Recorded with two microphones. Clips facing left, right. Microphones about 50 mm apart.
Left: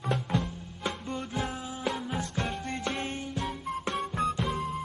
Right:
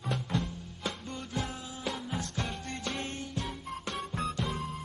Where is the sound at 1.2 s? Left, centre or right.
Centre.